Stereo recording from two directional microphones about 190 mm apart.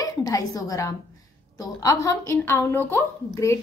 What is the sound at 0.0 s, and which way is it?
A woman's voice, 20° left (ahead or behind).